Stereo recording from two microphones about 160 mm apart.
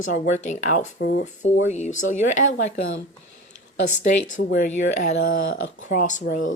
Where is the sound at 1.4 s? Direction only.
45° left (ahead or behind).